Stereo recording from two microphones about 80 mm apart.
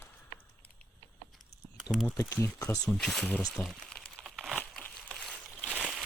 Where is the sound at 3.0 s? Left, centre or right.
Centre.